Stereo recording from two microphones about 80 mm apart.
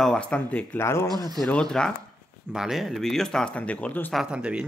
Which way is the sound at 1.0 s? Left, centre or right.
Right.